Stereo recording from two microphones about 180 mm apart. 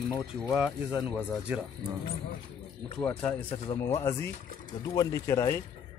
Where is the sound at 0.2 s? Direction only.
Centre (ahead or behind).